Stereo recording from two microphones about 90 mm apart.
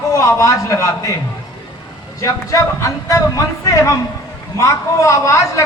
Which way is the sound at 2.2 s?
35° left (ahead or behind).